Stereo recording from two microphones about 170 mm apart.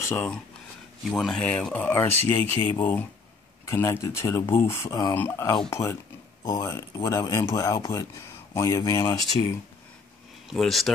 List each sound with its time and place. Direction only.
0.0 s speech: 15° left (ahead or behind)
1.1 s speech: centre (ahead or behind); by 9.6 s 20° left (ahead or behind)
10.5 s speech: centre (ahead or behind)